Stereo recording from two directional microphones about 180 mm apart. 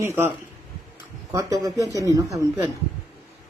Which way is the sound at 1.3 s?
20° right (ahead or behind).